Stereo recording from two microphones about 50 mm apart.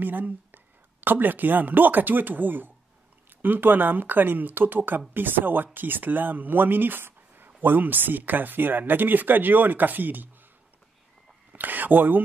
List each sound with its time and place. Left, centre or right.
0.0 s speech: right
11.5 s speech: right